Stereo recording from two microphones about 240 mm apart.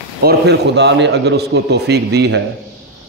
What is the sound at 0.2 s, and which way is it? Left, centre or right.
A man's voice, right.